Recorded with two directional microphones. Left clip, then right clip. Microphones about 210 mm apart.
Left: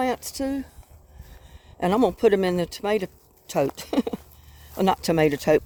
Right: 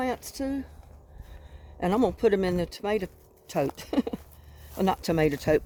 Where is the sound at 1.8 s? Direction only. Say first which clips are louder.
Left 4 dB; 40° left (ahead or behind).